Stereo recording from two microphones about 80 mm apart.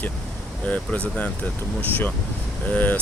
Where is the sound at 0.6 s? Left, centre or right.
Centre.